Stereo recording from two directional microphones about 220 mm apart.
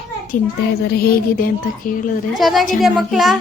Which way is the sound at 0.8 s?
45° left (ahead or behind).